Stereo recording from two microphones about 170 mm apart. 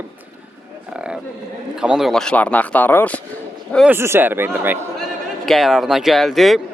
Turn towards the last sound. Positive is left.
turn(degrees=0)  # may be behind; listen again after turning